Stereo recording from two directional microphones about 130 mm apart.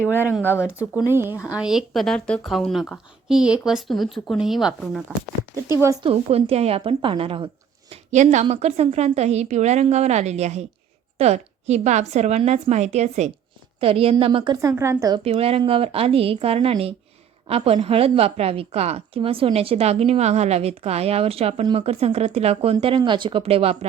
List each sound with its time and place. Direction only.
0.4 s speech: 20° left (ahead or behind)
0.8 s speech: 15° right (ahead or behind)
1.5 s speech: 5° right (ahead or behind)
6.0 s a woman's voice: 50° right (ahead or behind)
8.1 s a woman's voice: 65° right (ahead or behind)
8.5 s a woman's voice: 55° right (ahead or behind)
13.7 s a woman's voice: 45° right (ahead or behind)
14.5 s a woman's voice: 25° right (ahead or behind)
15.2 s a woman's voice: 50° right (ahead or behind)